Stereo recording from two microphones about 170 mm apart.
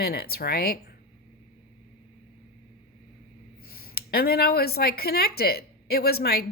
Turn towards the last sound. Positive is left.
turn(degrees=65)  # may be behind; listen again after turning